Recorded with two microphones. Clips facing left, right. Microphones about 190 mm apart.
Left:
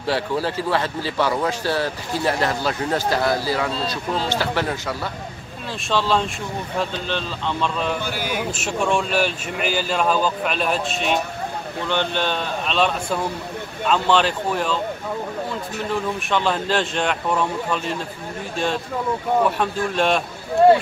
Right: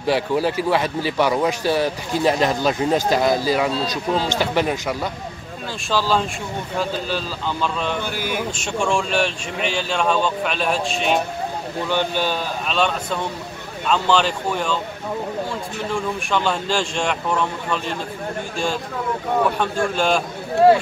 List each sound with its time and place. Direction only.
0.0 s speech: 15° right (ahead or behind)
5.9 s speech: centre (ahead or behind)
8.0 s a man's voice: 55° right (ahead or behind)
8.5 s speech: 5° left (ahead or behind)
15.9 s speech: centre (ahead or behind)
19.6 s speech: centre (ahead or behind)